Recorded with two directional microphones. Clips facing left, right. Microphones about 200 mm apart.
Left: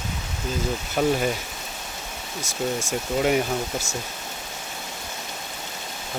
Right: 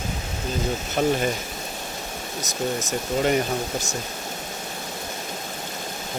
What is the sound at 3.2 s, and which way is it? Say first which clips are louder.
Speech: even; 5° left (ahead or behind).